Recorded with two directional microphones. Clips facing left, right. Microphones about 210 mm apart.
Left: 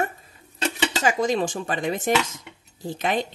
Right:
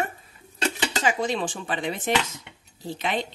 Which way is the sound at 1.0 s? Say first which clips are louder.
Left 3 dB; 45° left (ahead or behind).